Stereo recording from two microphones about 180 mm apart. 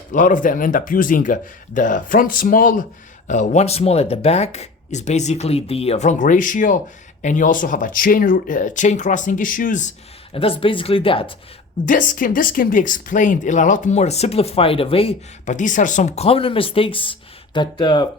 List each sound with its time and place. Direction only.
0.1 s speech: 45° left (ahead or behind)
10.3 s speech: 30° left (ahead or behind)
11.9 s speech: 50° left (ahead or behind); by 15.1 s 30° left (ahead or behind)
15.4 s speech: 45° left (ahead or behind); by 18.0 s 25° left (ahead or behind)